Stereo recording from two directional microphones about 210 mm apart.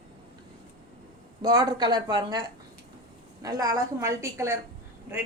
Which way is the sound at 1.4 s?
20° right (ahead or behind).